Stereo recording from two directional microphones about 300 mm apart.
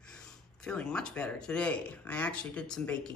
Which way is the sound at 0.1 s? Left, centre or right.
Centre.